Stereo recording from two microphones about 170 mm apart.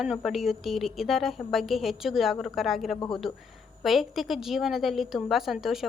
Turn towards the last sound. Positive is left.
turn(degrees=0)  # may be behind; listen again after turning